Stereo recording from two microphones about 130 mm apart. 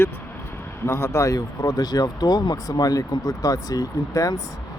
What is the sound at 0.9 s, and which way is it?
Speech, 20° left (ahead or behind).